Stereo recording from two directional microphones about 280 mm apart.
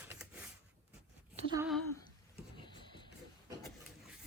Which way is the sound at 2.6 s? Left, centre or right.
Centre.